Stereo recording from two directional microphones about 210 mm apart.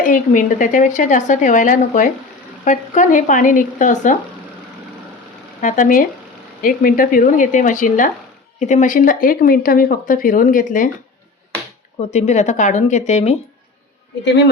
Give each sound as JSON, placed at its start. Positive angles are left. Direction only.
{"t": 0.0, "sound": "speech", "side_deg": 40}
{"t": 5.5, "sound": "speech", "side_deg": 35}
{"t": 12.1, "sound": "speech", "side_deg": 30}